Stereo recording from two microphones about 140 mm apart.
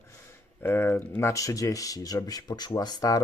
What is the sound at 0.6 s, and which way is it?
Speech, 15° left (ahead or behind).